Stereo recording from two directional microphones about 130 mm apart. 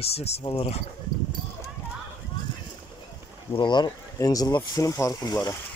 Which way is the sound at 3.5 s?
35° left (ahead or behind).